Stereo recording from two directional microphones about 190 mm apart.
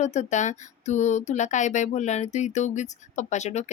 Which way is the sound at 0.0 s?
40° left (ahead or behind).